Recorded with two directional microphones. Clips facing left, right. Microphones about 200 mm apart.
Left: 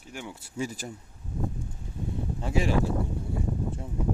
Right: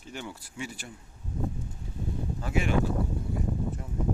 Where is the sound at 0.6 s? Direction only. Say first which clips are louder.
Left 5 dB; 40° left (ahead or behind).